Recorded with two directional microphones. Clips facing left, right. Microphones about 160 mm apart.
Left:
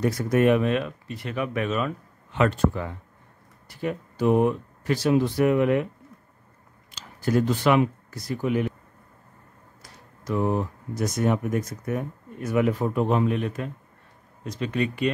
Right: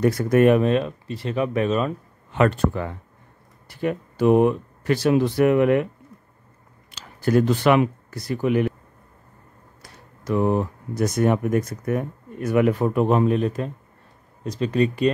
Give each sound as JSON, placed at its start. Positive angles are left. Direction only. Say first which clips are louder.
{"t": 0.0, "sound": "speech", "louder": "right 4 dB", "side_deg": -60}
{"t": 0.6, "sound": "speech", "louder": "right 4 dB", "side_deg": -35}
{"t": 2.3, "sound": "speech", "louder": "right 2 dB", "side_deg": -55}
{"t": 6.9, "sound": "speech", "louder": "right 4 dB", "side_deg": -65}
{"t": 9.8, "sound": "speech", "louder": "right 2 dB", "side_deg": -65}
{"t": 13.2, "sound": "speech", "louder": "right 4 dB", "side_deg": -35}